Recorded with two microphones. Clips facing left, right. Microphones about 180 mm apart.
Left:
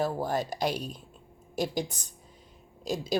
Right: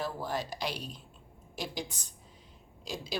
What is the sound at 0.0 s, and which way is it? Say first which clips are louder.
A woman's voice: left 6 dB; 45° left (ahead or behind).